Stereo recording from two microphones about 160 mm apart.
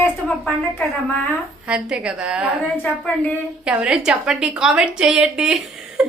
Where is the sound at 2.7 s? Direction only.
10° left (ahead or behind).